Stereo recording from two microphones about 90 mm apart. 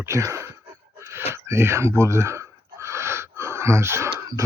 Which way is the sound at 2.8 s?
30° right (ahead or behind).